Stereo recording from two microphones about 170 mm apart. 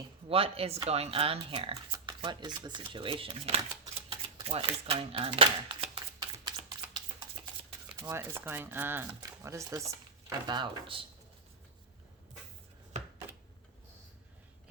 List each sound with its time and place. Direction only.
0.3 s speech: 35° right (ahead or behind)
6.4 s typing: 25° right (ahead or behind)
7.9 s speech: 15° right (ahead or behind)